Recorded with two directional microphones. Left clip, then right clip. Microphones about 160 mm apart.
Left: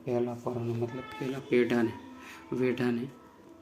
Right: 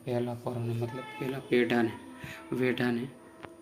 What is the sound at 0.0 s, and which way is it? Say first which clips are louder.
Speech: left 2 dB; centre (ahead or behind).